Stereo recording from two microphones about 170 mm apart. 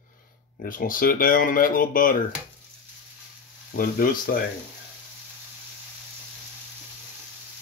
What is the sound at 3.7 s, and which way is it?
Speech, 55° left (ahead or behind).